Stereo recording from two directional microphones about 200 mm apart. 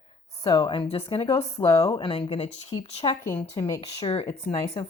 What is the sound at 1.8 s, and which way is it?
Speech, 25° left (ahead or behind).